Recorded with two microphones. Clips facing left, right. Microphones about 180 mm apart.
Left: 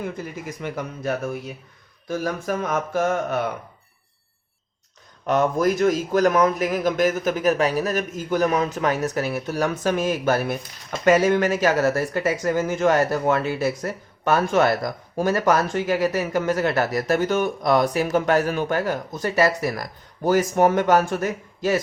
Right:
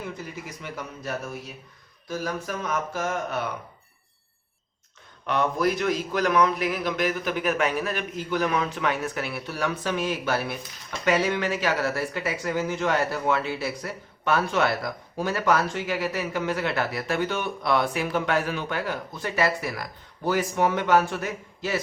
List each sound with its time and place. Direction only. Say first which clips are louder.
0.6 s speech: left 8 dB; 55° left (ahead or behind)
5.2 s speech: left 4 dB; 45° left (ahead or behind)